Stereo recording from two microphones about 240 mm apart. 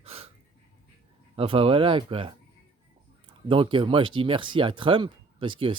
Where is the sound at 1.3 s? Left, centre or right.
Right.